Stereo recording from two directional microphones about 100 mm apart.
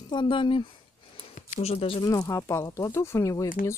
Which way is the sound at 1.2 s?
90° left.